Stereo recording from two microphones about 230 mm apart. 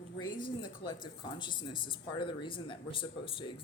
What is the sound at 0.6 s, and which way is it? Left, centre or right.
Speech, left.